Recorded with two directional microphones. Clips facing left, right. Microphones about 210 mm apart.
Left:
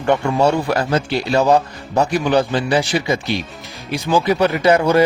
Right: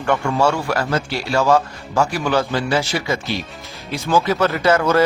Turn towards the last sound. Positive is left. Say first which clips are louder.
# left 2 dB
turn(degrees=15)  # may be behind; listen again after turning